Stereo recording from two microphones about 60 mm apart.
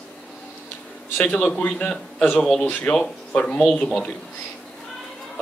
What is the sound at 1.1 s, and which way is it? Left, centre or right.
A man's voice, left.